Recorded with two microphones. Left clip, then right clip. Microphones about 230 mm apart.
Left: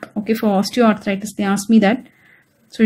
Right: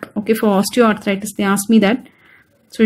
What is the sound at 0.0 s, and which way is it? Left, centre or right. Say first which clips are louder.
Speech: right 3 dB; centre.